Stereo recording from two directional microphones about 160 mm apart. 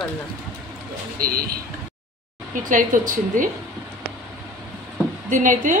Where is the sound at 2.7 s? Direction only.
55° right (ahead or behind).